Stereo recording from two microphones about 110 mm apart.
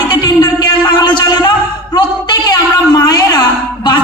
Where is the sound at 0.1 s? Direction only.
40° left (ahead or behind).